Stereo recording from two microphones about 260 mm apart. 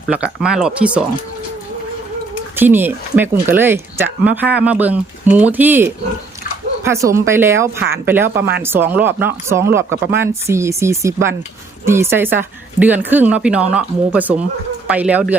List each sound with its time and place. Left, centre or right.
0.1 s speech: centre
2.6 s speech: centre